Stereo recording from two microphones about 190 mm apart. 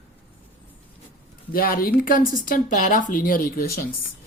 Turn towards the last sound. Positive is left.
turn(degrees=50)  # may be behind; listen again after turning